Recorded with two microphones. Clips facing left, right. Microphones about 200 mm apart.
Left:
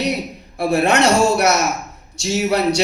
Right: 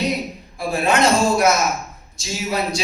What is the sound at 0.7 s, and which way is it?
A man's voice, 70° left (ahead or behind).